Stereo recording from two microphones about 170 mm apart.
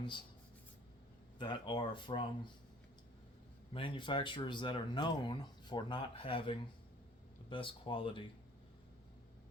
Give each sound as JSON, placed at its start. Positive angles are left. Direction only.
{"t": 1.4, "sound": "speech", "side_deg": 25}
{"t": 3.7, "sound": "speech", "side_deg": 30}